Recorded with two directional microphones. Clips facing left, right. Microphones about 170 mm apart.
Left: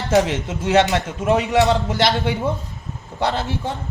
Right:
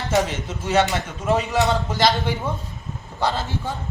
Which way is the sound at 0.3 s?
80° left.